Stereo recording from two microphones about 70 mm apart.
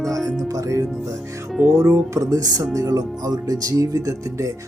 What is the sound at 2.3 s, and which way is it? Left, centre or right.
Speech, right.